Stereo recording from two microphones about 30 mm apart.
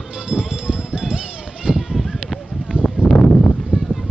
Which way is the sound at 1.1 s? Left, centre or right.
Right.